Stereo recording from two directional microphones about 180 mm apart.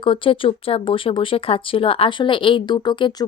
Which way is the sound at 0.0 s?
30° left (ahead or behind).